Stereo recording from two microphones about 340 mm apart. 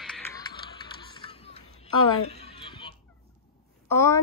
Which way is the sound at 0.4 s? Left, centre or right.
Centre.